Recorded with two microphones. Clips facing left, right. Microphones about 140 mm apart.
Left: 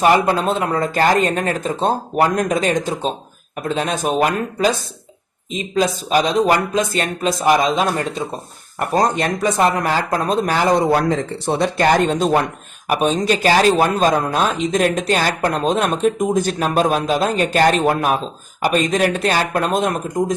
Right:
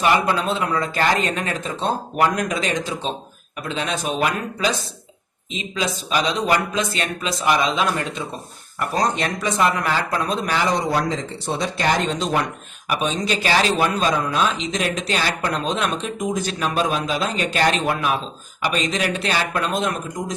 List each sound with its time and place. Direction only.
0.0 s speech: 45° left (ahead or behind)